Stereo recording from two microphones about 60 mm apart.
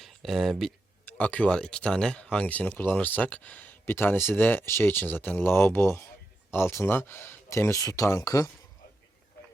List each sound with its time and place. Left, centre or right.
0.0 s speech: centre
1.0 s speech: left
2.5 s speech: left
7.5 s speech: left